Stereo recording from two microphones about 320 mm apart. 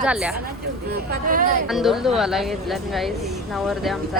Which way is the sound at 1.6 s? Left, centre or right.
Centre.